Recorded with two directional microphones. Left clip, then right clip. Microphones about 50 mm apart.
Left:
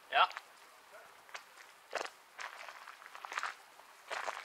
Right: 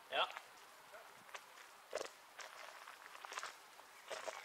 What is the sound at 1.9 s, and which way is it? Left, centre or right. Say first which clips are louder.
Walk: left 6 dB; left.